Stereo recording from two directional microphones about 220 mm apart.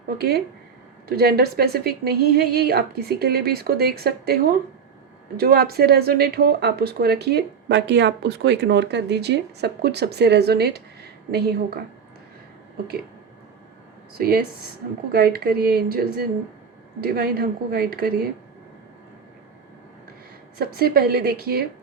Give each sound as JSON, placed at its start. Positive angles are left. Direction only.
{"t": 0.2, "sound": "speech", "side_deg": -45}
{"t": 5.4, "sound": "speech", "side_deg": -45}
{"t": 14.2, "sound": "speech", "side_deg": -45}
{"t": 20.6, "sound": "speech", "side_deg": -45}